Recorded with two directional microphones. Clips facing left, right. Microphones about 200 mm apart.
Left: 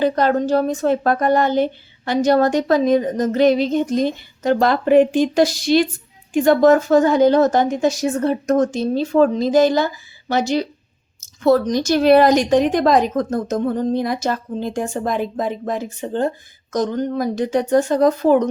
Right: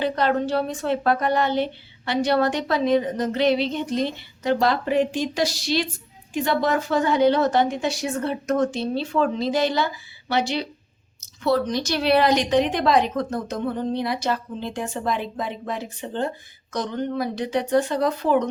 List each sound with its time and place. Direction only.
0.0 s a woman's voice: 45° left (ahead or behind)